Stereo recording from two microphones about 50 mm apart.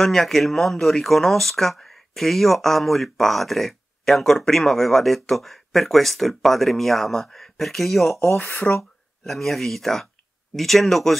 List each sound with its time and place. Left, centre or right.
0.0 s speech: centre
8.4 s speech: left
9.2 s speech: centre